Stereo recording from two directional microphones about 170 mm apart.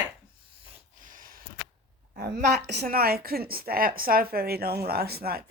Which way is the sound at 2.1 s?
65° right (ahead or behind).